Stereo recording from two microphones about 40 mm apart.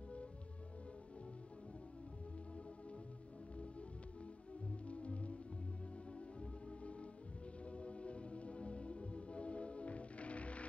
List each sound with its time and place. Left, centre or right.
4.8 s music: left
6.8 s music: left